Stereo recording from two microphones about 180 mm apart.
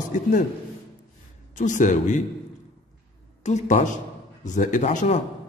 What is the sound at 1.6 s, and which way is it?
Speech, 45° left (ahead or behind).